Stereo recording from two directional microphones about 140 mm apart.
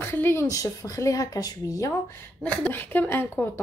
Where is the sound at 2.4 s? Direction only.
10° left (ahead or behind).